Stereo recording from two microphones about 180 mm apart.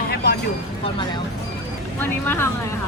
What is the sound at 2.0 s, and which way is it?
Speech, 10° left (ahead or behind).